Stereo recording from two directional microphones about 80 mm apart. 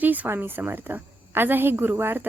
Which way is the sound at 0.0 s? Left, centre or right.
Right.